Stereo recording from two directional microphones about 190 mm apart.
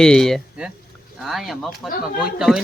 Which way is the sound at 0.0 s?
Centre (ahead or behind).